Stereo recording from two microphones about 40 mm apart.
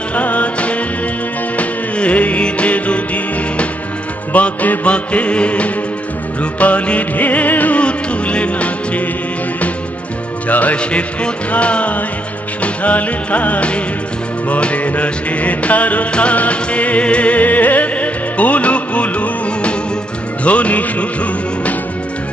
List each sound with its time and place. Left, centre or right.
0.1 s music: left
4.3 s music: left
7.8 s music: left
10.5 s music: left
10.8 s music: left